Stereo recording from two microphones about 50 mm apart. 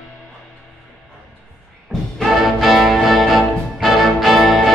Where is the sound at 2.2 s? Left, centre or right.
Centre.